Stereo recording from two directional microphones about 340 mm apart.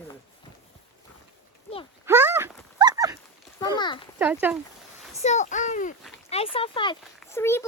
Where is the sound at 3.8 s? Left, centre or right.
Centre.